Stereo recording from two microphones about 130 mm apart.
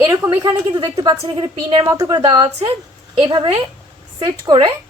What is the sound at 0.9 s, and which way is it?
Speech, 45° right (ahead or behind).